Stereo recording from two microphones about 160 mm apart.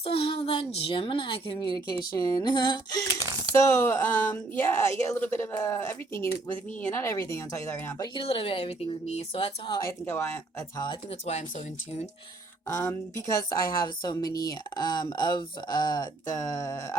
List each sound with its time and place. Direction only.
0.0 s a woman's voice: 35° left (ahead or behind)
8.2 s a woman's voice: 35° left (ahead or behind)
10.1 s speech: 15° left (ahead or behind)
11.3 s speech: 45° left (ahead or behind)
12.6 s speech: 20° left (ahead or behind)